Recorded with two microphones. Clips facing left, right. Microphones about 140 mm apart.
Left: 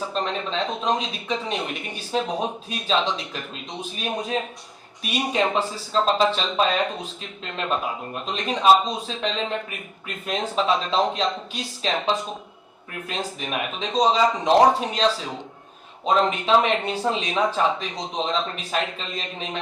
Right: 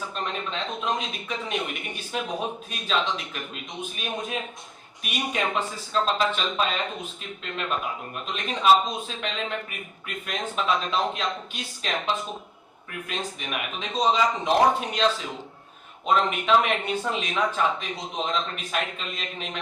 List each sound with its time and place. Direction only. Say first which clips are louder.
0.0 s speech: left 5 dB; 30° left (ahead or behind)